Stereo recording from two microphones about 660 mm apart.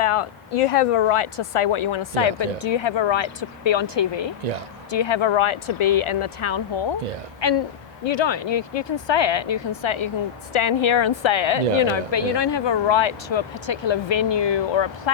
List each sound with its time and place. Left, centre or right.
0.0 s a woman's voice: left